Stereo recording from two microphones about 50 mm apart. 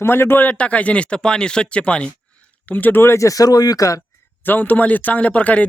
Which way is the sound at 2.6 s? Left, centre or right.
Left.